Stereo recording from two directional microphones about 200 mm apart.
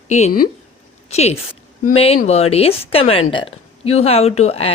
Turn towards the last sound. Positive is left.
turn(degrees=30)  # may be behind; listen again after turning